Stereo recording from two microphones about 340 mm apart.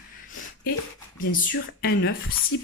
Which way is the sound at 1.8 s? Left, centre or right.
Left.